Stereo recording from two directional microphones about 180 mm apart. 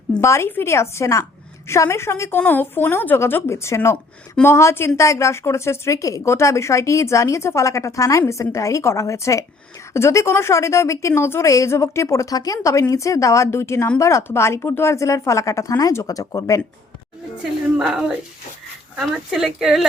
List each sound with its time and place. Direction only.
0.1 s a woman's voice: 15° left (ahead or behind)
17.7 s speech: 5° right (ahead or behind)